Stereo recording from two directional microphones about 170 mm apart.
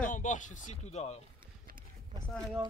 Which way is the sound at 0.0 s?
50° left (ahead or behind).